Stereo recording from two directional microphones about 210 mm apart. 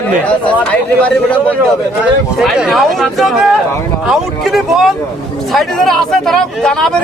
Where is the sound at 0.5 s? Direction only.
5° left (ahead or behind).